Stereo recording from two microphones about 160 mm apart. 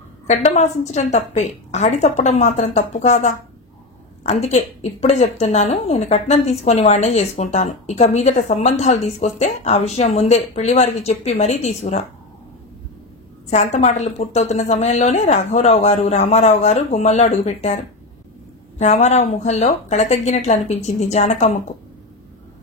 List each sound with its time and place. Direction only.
0.3 s a woman's voice: 45° left (ahead or behind)
13.5 s a woman's voice: 45° left (ahead or behind)
18.8 s a woman's voice: 45° left (ahead or behind)